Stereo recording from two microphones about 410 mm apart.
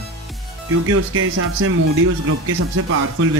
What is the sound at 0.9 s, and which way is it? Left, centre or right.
Speech, right.